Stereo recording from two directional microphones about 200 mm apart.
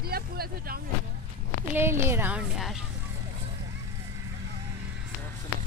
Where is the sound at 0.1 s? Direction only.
50° right (ahead or behind).